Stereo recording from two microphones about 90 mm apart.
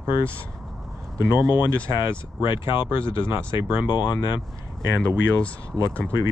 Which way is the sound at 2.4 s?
55° left (ahead or behind).